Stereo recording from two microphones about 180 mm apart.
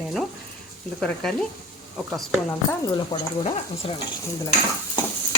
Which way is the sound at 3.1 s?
30° left (ahead or behind).